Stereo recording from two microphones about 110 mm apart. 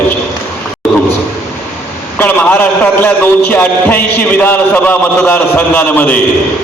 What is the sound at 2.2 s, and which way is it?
A man's voice, 15° left (ahead or behind).